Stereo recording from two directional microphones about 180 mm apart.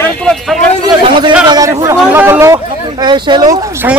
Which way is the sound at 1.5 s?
20° right (ahead or behind).